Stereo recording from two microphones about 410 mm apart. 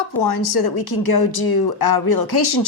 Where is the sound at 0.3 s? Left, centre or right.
Left.